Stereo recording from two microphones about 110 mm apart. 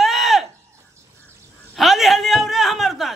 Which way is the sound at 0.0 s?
Centre (ahead or behind).